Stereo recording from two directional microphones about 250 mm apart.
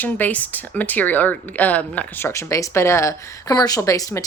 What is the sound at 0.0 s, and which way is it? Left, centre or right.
Speech, centre.